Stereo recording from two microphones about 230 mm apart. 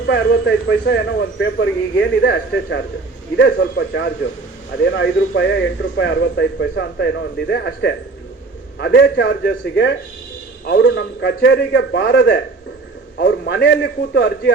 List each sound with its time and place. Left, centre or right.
0.1 s speech: left